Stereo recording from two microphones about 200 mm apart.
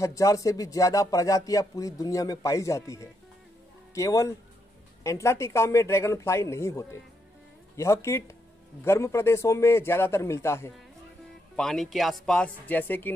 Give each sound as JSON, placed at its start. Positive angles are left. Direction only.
{"t": 0.0, "sound": "speech", "side_deg": 15}
{"t": 11.5, "sound": "speech", "side_deg": 0}